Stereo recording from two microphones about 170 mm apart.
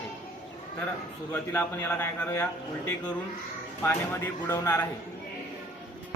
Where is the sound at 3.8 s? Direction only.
15° left (ahead or behind).